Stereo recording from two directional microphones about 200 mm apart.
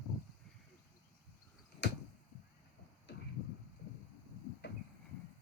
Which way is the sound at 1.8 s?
55° left (ahead or behind).